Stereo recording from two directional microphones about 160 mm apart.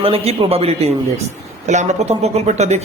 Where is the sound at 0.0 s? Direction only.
35° right (ahead or behind).